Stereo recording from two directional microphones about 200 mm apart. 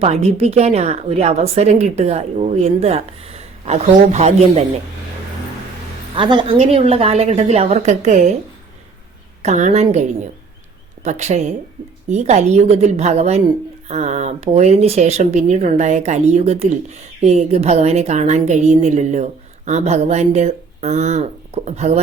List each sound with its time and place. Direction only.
0.0 s a woman's voice: 30° right (ahead or behind)
6.1 s a woman's voice: 25° right (ahead or behind)
9.4 s a woman's voice: 35° right (ahead or behind)